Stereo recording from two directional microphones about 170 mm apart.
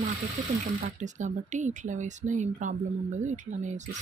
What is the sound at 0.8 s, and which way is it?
Speech, 45° right (ahead or behind).